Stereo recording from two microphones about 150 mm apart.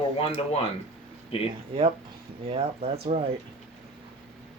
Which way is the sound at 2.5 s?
45° right (ahead or behind).